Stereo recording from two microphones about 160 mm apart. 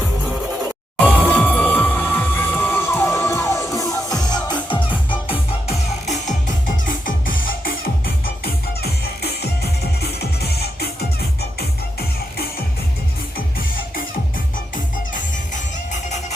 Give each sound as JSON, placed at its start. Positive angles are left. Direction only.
{"t": 1.0, "sound": "music", "side_deg": 10}
{"t": 5.3, "sound": "music", "side_deg": 40}
{"t": 6.8, "sound": "music", "side_deg": 60}
{"t": 8.8, "sound": "music", "side_deg": 85}
{"t": 15.1, "sound": "music", "side_deg": 50}